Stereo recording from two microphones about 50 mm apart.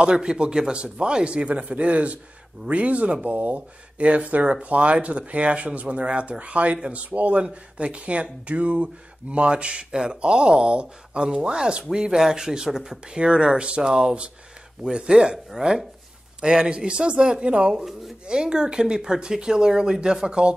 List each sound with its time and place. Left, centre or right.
0.0 s speech: centre